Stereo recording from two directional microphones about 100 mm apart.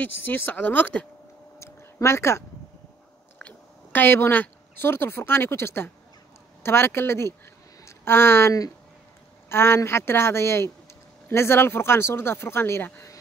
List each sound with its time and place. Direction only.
0.0 s speech: 20° left (ahead or behind)
1.6 s a sound: 30° left (ahead or behind)
3.3 s speech: 15° left (ahead or behind)